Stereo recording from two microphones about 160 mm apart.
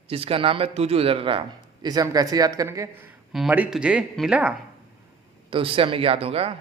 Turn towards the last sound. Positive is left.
turn(degrees=-35)  # may be behind; listen again after turning